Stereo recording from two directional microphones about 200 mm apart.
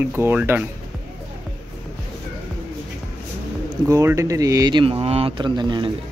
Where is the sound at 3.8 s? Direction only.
15° right (ahead or behind).